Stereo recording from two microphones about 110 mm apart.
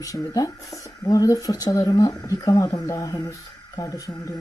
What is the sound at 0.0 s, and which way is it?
Speech, 35° left (ahead or behind).